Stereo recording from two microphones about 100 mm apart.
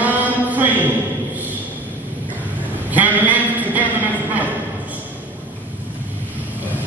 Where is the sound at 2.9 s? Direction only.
15° right (ahead or behind).